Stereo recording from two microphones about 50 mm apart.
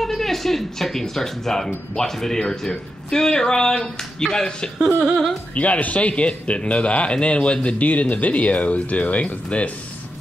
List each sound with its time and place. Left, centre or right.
0.0 s speech: centre
5.0 s speech: centre
5.5 s speech: left